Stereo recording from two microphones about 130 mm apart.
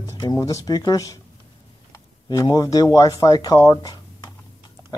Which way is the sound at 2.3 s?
30° left (ahead or behind).